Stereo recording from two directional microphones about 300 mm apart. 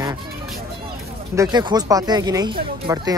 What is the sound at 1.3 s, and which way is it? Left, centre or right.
Speech, centre.